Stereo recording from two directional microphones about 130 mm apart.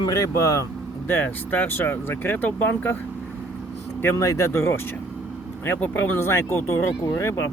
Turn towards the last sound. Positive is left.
turn(degrees=25)  # may be behind; listen again after turning